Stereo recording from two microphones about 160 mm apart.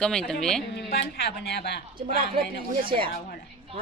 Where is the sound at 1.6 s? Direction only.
90° left.